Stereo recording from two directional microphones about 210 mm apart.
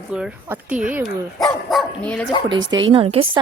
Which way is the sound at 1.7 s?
5° left (ahead or behind).